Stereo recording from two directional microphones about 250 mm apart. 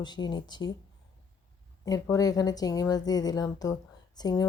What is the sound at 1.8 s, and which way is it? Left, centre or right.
A woman's voice, centre.